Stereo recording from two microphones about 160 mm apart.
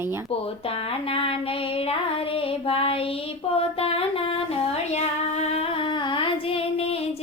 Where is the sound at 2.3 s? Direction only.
35° left (ahead or behind).